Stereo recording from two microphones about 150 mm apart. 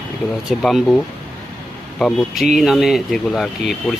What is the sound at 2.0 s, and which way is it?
Speech, centre (ahead or behind).